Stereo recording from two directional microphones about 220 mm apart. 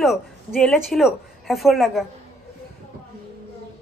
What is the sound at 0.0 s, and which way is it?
A woman's voice, centre (ahead or behind).